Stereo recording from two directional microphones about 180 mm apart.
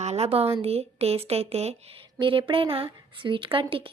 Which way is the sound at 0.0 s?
35° right (ahead or behind).